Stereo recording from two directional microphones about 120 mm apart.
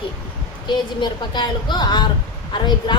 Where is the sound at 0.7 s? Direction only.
40° left (ahead or behind).